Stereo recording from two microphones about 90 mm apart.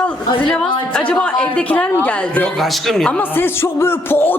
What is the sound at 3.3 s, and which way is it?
A woman's voice, 25° left (ahead or behind).